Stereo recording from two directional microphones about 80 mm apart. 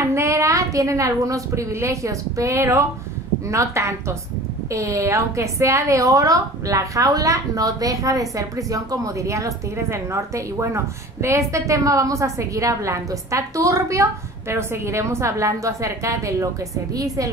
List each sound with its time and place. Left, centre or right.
0.0 s a woman's voice: right